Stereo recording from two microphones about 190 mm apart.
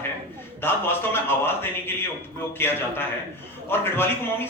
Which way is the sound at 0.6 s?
10° left (ahead or behind).